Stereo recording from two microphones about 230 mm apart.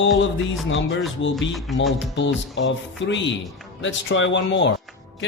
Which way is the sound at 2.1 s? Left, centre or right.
Left.